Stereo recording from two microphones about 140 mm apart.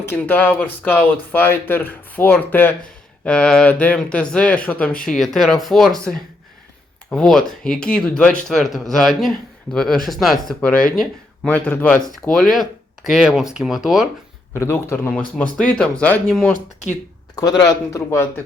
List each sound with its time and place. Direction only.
0.0 s speech: 15° left (ahead or behind)
11.5 s speech: 10° left (ahead or behind)
12.3 s speech: centre (ahead or behind)
14.5 s speech: 20° left (ahead or behind)
17.6 s a man's voice: 20° left (ahead or behind)